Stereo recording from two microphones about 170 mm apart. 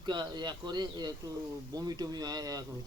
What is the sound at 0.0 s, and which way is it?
Speech, 25° right (ahead or behind).